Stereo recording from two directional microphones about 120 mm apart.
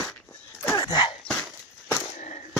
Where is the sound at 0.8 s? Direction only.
35° left (ahead or behind).